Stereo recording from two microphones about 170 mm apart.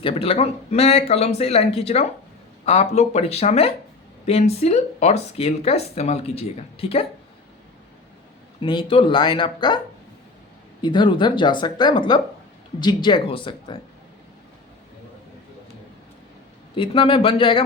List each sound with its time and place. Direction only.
0.0 s speech: 35° left (ahead or behind)
8.6 s speech: 30° left (ahead or behind)
16.7 s speech: 30° left (ahead or behind)